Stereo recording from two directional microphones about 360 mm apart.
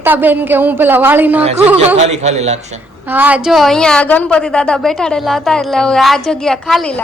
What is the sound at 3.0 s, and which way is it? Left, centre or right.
A woman's voice, centre.